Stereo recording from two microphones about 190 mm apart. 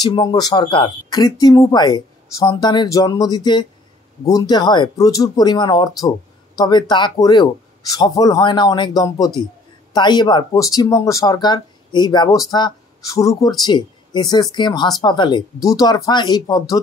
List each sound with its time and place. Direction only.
0.0 s speech: 20° left (ahead or behind)